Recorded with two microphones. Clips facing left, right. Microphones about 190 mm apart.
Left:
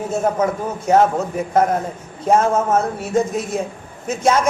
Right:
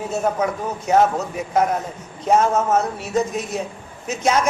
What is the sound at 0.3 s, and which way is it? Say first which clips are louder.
A man's voice: left 3 dB; 50° left (ahead or behind).